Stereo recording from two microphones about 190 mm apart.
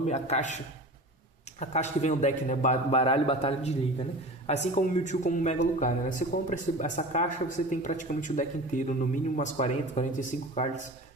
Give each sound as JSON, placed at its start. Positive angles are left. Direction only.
{"t": 0.0, "sound": "a man's voice", "side_deg": 35}